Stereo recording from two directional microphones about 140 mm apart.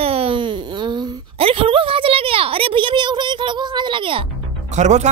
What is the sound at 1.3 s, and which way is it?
A woman's voice, 40° right (ahead or behind).